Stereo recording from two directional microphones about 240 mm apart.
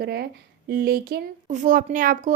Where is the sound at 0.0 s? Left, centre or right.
Right.